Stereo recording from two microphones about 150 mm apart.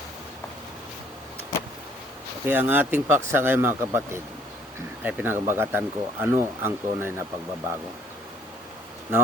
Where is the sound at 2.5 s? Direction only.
15° right (ahead or behind).